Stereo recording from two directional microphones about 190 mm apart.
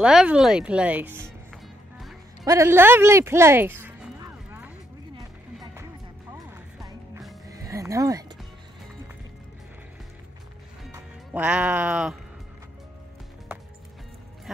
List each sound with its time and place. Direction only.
0.0 s speech: 5° right (ahead or behind)
1.5 s music: centre (ahead or behind)
2.4 s a sound: 15° right (ahead or behind)
5.1 s music: 20° right (ahead or behind)
7.4 s a sound: 15° right (ahead or behind)
10.9 s speech: 10° right (ahead or behind)